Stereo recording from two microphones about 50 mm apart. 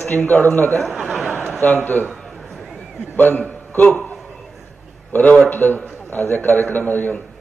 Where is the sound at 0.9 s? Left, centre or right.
Centre.